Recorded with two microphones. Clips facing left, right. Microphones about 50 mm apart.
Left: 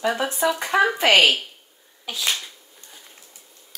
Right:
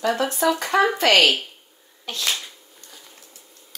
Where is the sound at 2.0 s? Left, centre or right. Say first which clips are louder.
Even; centre.